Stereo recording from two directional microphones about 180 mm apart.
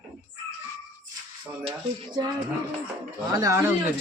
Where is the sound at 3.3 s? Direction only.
20° right (ahead or behind).